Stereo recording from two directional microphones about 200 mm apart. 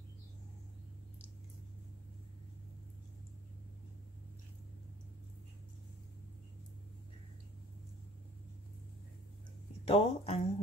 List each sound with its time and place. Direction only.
9.8 s speech: 30° left (ahead or behind)